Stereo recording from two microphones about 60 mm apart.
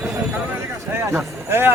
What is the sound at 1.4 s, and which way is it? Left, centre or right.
Speech, right.